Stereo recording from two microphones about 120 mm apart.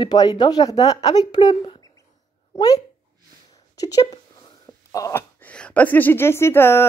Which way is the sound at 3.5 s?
30° left (ahead or behind).